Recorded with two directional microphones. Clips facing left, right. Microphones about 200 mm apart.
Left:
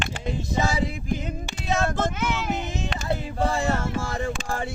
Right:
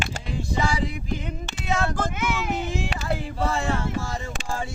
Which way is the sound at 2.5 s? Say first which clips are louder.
Right 2 dB; 20° left (ahead or behind).